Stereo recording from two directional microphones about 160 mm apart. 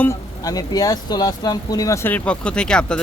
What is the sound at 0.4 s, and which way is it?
Speech, 25° left (ahead or behind).